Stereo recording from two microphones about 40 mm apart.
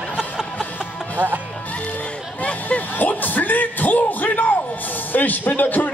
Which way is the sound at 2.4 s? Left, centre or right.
Left.